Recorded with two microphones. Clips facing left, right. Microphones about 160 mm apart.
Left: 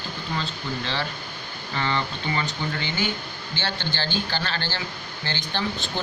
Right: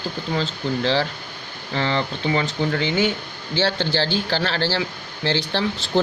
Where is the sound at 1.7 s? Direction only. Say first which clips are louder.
Right 4 dB; 90° right.